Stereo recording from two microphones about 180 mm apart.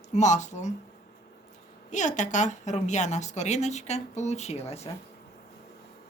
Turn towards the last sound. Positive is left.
turn(degrees=35)  # may be behind; listen again after turning